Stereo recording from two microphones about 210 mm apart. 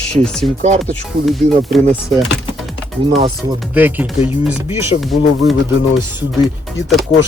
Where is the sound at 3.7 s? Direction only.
10° right (ahead or behind).